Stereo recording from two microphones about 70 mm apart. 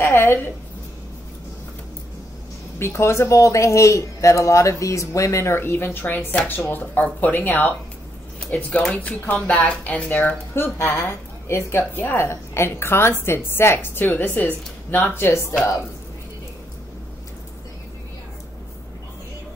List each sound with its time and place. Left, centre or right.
0.0 s a woman's voice: left
2.8 s speech: left
10.5 s speech: left
11.9 s a woman's voice: left